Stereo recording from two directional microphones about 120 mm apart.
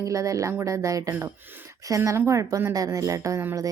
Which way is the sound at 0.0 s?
25° right (ahead or behind).